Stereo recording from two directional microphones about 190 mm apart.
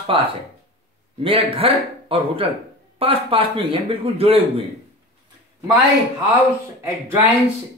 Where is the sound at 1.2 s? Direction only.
30° right (ahead or behind).